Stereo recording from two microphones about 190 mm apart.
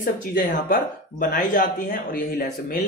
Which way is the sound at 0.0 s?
45° left (ahead or behind).